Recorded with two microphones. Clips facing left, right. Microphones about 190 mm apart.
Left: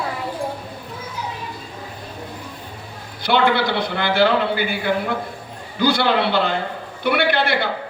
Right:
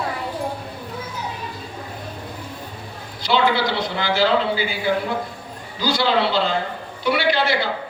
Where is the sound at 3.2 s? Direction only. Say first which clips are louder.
Left 1 dB; 60° left (ahead or behind).